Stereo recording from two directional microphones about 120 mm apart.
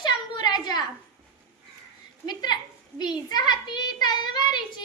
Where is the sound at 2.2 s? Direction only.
35° left (ahead or behind).